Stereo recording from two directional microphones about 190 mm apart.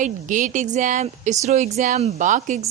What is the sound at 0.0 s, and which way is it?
A woman's voice, 45° right (ahead or behind).